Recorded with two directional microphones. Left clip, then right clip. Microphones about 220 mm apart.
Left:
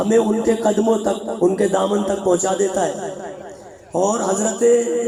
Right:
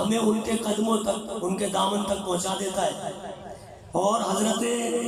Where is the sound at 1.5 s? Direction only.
35° left (ahead or behind).